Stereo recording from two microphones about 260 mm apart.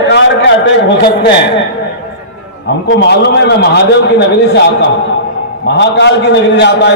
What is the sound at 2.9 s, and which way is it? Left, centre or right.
A man's voice, left.